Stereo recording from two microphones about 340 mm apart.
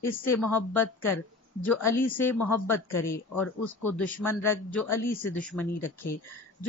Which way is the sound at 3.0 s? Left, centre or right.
Centre.